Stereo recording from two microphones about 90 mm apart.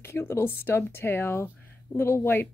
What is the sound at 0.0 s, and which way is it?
Speech, 25° left (ahead or behind).